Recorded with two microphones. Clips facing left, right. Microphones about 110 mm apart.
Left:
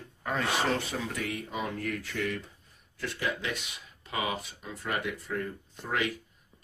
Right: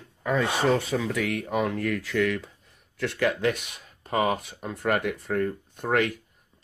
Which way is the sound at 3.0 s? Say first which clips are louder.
Right 8 dB; 65° right (ahead or behind).